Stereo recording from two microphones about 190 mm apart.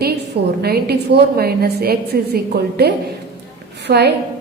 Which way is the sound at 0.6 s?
55° right (ahead or behind).